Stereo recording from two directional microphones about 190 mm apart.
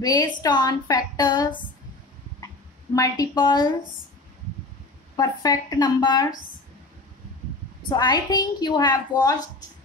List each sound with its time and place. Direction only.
0.0 s speech: 20° left (ahead or behind)
5.1 s speech: 20° left (ahead or behind)
7.9 s speech: 20° left (ahead or behind)